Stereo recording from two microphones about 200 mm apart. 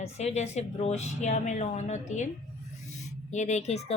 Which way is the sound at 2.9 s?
35° left (ahead or behind).